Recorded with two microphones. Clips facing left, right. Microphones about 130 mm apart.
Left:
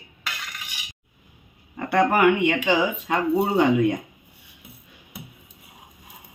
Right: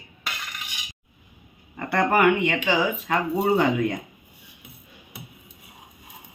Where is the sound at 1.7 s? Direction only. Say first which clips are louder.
Left 1 dB; 10° left (ahead or behind).